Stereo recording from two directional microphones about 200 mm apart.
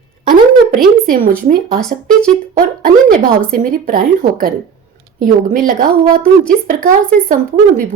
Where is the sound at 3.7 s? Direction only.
45° right (ahead or behind).